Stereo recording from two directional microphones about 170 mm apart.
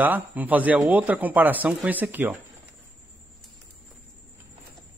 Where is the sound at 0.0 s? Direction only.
10° right (ahead or behind).